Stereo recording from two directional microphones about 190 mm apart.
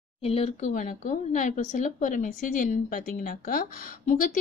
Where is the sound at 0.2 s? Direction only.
30° left (ahead or behind).